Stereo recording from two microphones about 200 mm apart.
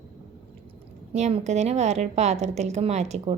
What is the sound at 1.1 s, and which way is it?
A woman's voice, 35° right (ahead or behind).